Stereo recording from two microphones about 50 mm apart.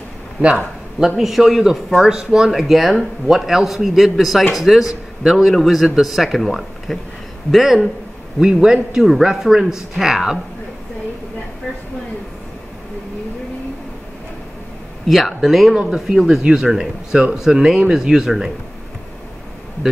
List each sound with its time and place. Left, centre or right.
0.4 s speech: right
15.0 s speech: centre
15.7 s speech: centre